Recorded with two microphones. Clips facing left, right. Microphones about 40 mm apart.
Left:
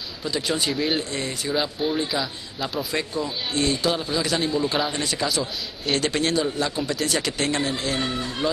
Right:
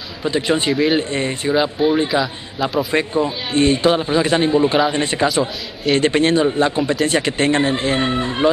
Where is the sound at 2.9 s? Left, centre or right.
Right.